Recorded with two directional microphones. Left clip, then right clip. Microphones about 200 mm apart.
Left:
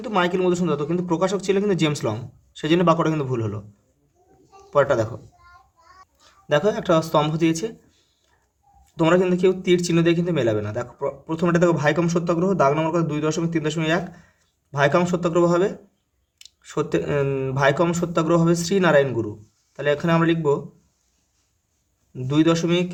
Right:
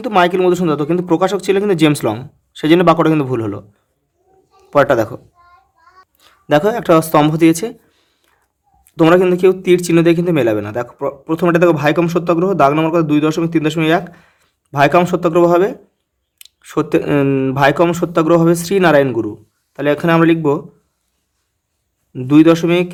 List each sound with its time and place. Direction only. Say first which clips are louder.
0.0 s speech: right 9 dB; 35° right (ahead or behind)
4.7 s a man's voice: right 7 dB; 40° right (ahead or behind)
8.9 s speech: right 8 dB; 40° right (ahead or behind)
22.1 s speech: right 10 dB; 35° right (ahead or behind)